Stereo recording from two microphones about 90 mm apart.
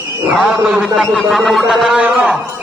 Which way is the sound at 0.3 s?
5° right (ahead or behind).